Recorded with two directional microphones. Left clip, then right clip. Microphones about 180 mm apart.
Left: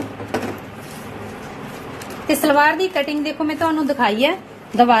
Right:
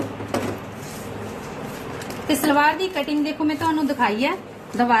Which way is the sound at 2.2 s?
45° left (ahead or behind).